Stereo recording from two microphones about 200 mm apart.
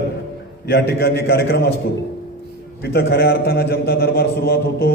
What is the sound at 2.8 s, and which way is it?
A man's voice, 55° left (ahead or behind).